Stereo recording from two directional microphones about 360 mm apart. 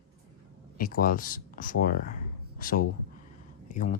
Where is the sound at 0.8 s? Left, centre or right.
Left.